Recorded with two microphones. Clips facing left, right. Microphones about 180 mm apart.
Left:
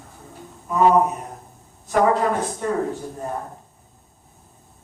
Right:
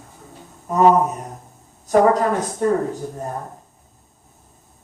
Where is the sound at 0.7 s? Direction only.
40° right (ahead or behind).